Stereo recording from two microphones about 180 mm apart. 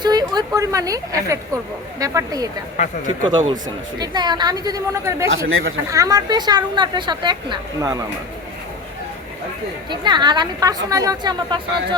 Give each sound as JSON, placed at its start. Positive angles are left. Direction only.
{"t": 0.0, "sound": "a woman's voice", "side_deg": -25}
{"t": 5.3, "sound": "speech", "side_deg": -90}
{"t": 5.9, "sound": "speech", "side_deg": -20}
{"t": 9.9, "sound": "speech", "side_deg": -25}